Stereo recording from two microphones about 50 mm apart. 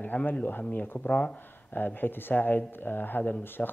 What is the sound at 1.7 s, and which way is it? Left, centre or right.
Speech, left.